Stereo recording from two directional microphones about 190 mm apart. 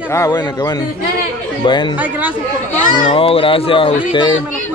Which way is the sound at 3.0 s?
30° left (ahead or behind).